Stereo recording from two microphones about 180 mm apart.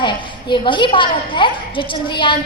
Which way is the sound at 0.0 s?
25° left (ahead or behind).